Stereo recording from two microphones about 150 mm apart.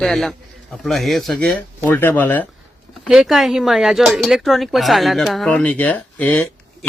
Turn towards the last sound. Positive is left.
turn(degrees=10)  # may be behind; listen again after turning